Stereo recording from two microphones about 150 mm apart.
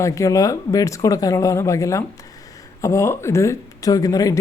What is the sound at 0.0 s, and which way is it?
Speech, 20° left (ahead or behind).